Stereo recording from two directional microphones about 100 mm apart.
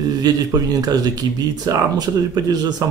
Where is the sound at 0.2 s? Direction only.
40° right (ahead or behind).